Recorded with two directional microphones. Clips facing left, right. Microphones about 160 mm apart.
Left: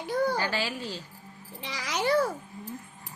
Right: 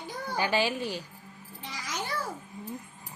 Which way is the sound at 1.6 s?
75° left (ahead or behind).